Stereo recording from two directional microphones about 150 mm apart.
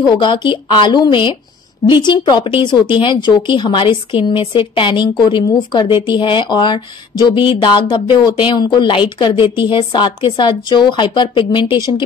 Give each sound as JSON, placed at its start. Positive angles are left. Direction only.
{"t": 0.0, "sound": "speech", "side_deg": 30}